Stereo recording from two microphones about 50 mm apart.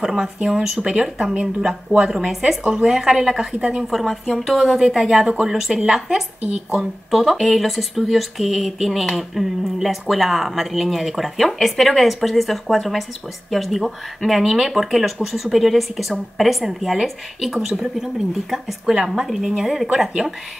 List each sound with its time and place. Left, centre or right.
0.0 s a woman's voice: centre
1.6 s a woman's voice: centre
3.9 s a woman's voice: centre